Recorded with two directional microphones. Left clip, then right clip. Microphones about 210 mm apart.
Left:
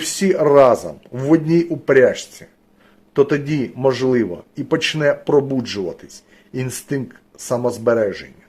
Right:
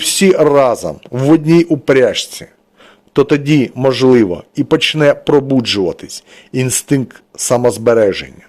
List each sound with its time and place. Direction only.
0.0 s a man's voice: 40° right (ahead or behind)